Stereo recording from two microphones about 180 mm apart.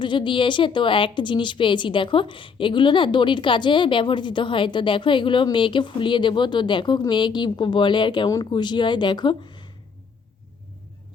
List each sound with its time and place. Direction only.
0.0 s a woman's voice: 25° left (ahead or behind)